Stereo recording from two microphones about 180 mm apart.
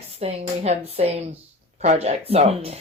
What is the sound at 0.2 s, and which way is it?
Speech, 35° right (ahead or behind).